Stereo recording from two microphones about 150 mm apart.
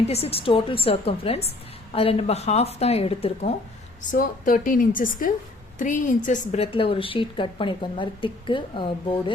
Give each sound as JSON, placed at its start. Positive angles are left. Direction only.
{"t": 0.1, "sound": "a woman's voice", "side_deg": 40}
{"t": 4.1, "sound": "a woman's voice", "side_deg": 65}
{"t": 6.6, "sound": "a woman's voice", "side_deg": 35}